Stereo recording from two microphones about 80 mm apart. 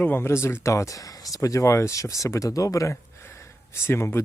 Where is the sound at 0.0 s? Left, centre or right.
Left.